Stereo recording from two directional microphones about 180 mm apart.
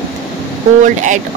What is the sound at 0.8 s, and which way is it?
Speech, 45° right (ahead or behind).